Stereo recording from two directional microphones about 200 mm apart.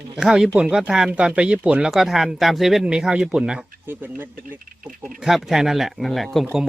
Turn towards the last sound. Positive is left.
turn(degrees=0)  # may be behind; listen again after turning